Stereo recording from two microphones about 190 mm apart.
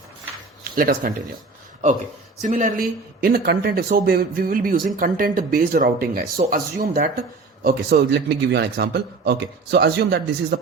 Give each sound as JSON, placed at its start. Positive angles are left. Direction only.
{"t": 0.8, "sound": "speech", "side_deg": -50}
{"t": 2.4, "sound": "speech", "side_deg": -45}